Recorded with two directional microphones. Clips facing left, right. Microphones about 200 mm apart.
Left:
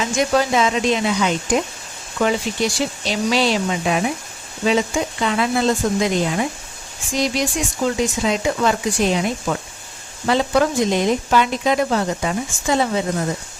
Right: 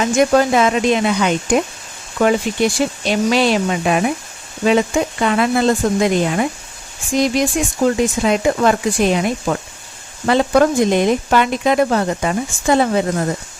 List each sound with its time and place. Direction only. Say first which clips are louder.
0.0 s speech: right 5 dB; 55° right (ahead or behind)